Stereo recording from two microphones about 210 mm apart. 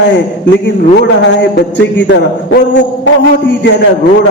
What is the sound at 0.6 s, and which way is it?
A man's voice, 55° left (ahead or behind).